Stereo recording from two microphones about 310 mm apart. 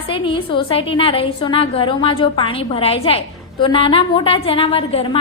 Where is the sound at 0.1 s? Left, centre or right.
Centre.